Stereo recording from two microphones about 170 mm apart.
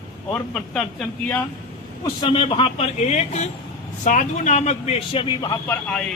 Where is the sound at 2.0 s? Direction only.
25° left (ahead or behind); by 6.1 s 5° left (ahead or behind).